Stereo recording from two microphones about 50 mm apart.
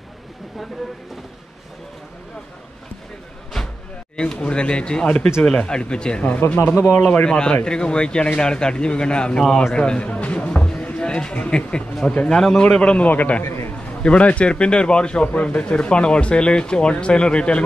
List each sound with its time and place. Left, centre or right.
4.2 s a man's voice: centre
6.6 s speech: left
7.0 s a man's voice: left
7.2 s a man's voice: centre
10.9 s a sound: left
11.4 s a man's voice: centre
12.9 s a man's voice: left
13.4 s a man's voice: left
14.0 s speech: left